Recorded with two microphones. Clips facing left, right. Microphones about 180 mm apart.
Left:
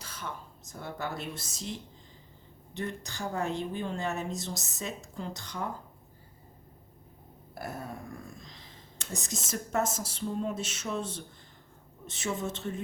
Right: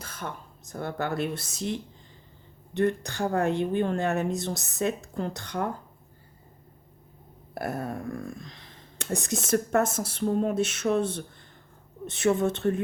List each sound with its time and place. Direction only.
0.0 s speech: 55° right (ahead or behind)
7.5 s speech: 65° right (ahead or behind)